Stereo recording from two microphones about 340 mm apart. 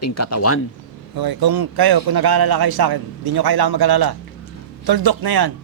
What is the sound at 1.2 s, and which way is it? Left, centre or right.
A man's voice, right.